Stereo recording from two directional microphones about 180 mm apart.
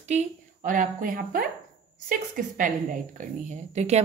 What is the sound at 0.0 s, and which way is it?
A woman's voice, 40° right (ahead or behind).